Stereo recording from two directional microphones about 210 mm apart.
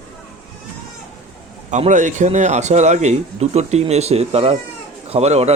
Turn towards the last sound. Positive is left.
turn(degrees=-30)  # may be behind; listen again after turning